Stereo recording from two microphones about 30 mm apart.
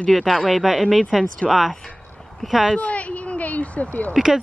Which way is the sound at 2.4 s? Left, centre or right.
Centre.